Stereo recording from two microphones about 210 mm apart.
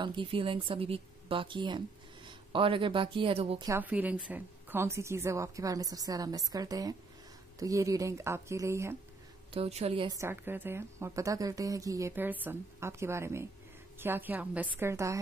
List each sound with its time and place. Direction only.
0.0 s speech: 25° right (ahead or behind)
3.6 s a woman's voice: 10° right (ahead or behind)
9.5 s a woman's voice: 30° right (ahead or behind); by 15.1 s 15° right (ahead or behind)